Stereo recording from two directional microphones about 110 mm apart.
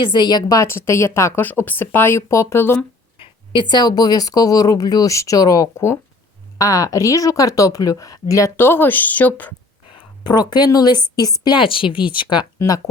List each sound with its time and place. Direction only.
0.0 s a woman's voice: 45° left (ahead or behind); by 2.8 s 20° left (ahead or behind)
3.2 s speech: 50° left (ahead or behind); by 9.5 s 15° left (ahead or behind)
10.2 s a woman's voice: 40° left (ahead or behind)
12.5 s speech: 35° left (ahead or behind)